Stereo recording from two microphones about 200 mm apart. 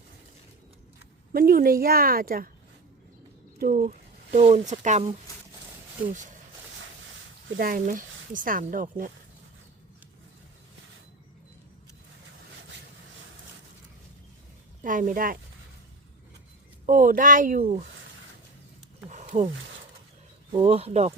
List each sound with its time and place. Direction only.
1.3 s speech: 45° right (ahead or behind)
3.6 s speech: 40° right (ahead or behind)
7.5 s speech: 45° right (ahead or behind)
14.8 s speech: 40° right (ahead or behind)
16.8 s speech: 40° right (ahead or behind)
19.1 s a sound: 35° right (ahead or behind)
20.6 s speech: 30° right (ahead or behind)